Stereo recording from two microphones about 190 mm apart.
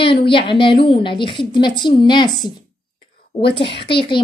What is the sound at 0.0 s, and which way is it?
A woman's voice, 25° left (ahead or behind).